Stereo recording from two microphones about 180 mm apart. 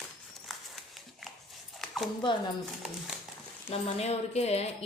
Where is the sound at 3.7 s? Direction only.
35° left (ahead or behind).